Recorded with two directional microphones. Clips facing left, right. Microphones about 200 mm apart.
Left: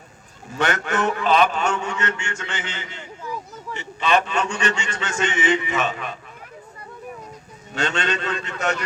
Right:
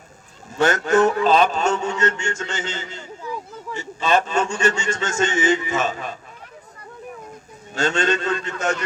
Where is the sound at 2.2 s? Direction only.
45° right (ahead or behind).